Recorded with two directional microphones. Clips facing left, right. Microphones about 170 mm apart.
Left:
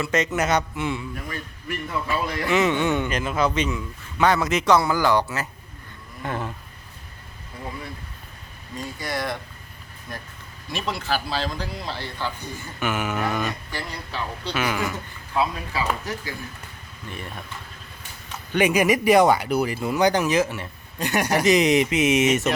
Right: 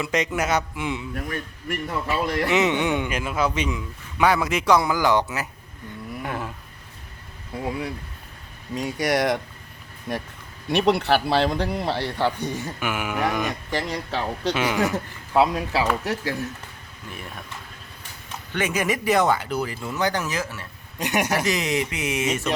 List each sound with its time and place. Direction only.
0.0 s a man's voice: 15° right (ahead or behind)
1.1 s speech: 60° right (ahead or behind)
2.5 s a man's voice: 20° right (ahead or behind)
8.7 s speech: 80° right
12.8 s a man's voice: 10° right (ahead or behind)
13.7 s speech: 80° right
14.5 s speech: 25° right (ahead or behind)
14.8 s speech: 85° right
17.1 s speech: 5° right (ahead or behind)
18.5 s speech: 15° left (ahead or behind)
21.0 s speech: 20° right (ahead or behind)
21.2 s speech: 20° left (ahead or behind)